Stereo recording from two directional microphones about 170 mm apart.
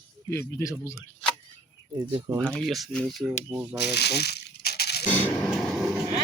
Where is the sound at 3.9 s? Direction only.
75° left (ahead or behind).